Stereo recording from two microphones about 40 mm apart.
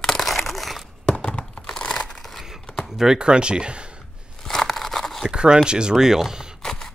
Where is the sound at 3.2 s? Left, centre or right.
Right.